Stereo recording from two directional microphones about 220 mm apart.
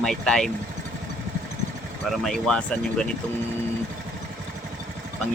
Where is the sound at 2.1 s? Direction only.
Centre (ahead or behind).